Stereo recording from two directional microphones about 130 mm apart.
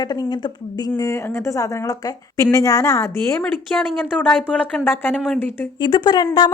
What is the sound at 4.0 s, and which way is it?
Speech, 10° left (ahead or behind).